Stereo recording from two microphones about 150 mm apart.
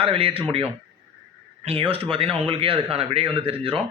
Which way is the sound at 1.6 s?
40° right (ahead or behind).